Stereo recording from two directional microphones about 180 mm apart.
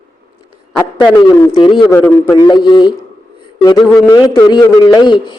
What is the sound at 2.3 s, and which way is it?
Speech, 25° left (ahead or behind).